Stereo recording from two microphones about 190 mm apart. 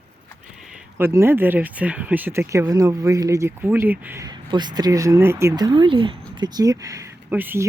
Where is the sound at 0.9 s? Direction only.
10° right (ahead or behind).